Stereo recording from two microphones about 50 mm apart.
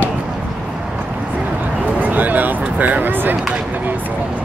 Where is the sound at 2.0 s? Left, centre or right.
Right.